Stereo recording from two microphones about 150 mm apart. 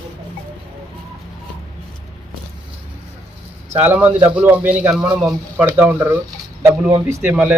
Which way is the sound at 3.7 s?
10° right (ahead or behind).